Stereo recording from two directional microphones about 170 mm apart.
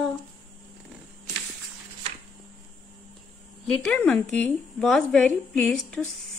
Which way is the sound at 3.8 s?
5° left (ahead or behind).